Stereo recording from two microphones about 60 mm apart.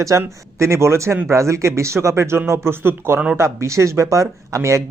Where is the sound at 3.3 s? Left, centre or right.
Right.